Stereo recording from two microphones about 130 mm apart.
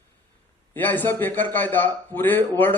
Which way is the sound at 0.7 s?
15° left (ahead or behind).